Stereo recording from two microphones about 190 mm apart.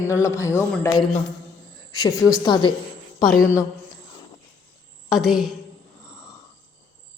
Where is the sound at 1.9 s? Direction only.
20° left (ahead or behind).